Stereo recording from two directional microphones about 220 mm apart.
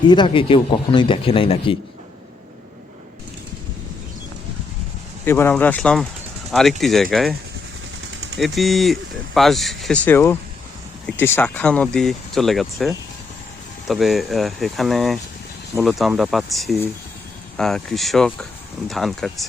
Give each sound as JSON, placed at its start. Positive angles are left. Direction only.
{"t": 0.1, "sound": "speech", "side_deg": 20}
{"t": 5.2, "sound": "speech", "side_deg": 10}
{"t": 8.4, "sound": "speech", "side_deg": 0}
{"t": 11.3, "sound": "speech", "side_deg": 5}